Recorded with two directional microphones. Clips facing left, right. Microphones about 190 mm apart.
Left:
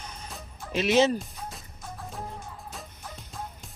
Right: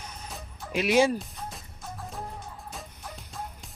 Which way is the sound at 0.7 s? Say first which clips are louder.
Even; 10° right (ahead or behind).